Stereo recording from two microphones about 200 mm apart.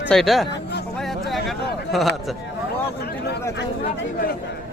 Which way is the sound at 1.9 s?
Centre (ahead or behind).